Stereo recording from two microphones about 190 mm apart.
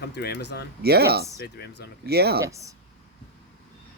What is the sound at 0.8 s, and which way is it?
Speech, 55° right (ahead or behind).